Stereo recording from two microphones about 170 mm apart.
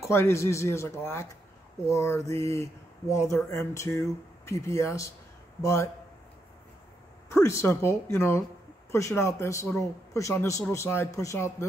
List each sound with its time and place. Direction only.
0.0 s speech: 15° left (ahead or behind)
7.4 s speech: 15° left (ahead or behind)